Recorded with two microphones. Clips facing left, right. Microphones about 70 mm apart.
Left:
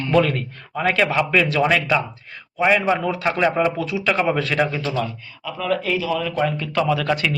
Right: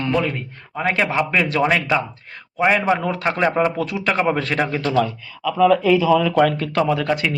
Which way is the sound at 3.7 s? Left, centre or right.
Right.